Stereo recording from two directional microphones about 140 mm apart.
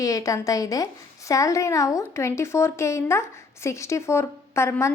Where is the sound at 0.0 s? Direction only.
25° left (ahead or behind).